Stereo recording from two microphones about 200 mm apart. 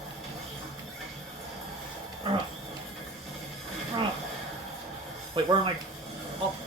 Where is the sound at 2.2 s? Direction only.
25° right (ahead or behind).